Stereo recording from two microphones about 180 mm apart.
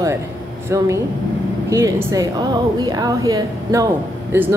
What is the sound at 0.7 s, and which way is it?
A woman's voice, 15° right (ahead or behind).